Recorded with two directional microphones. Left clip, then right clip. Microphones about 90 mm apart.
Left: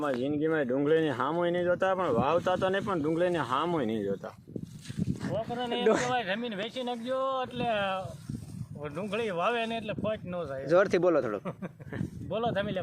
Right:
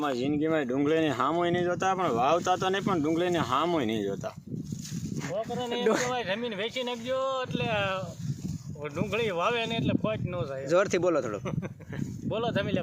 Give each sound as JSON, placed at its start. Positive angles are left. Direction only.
{"t": 0.0, "sound": "speech", "side_deg": -30}
{"t": 5.4, "sound": "speech", "side_deg": -25}
{"t": 5.8, "sound": "speech", "side_deg": 0}
{"t": 6.1, "sound": "speech", "side_deg": -45}
{"t": 10.7, "sound": "speech", "side_deg": 0}
{"t": 12.3, "sound": "speech", "side_deg": -50}